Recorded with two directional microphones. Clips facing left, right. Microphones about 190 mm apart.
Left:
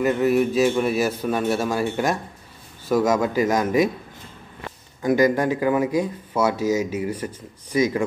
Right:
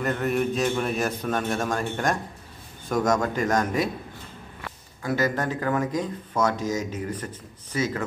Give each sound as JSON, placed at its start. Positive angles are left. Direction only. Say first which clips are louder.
{"t": 0.0, "sound": "a man's voice", "louder": "left 6 dB", "side_deg": 5}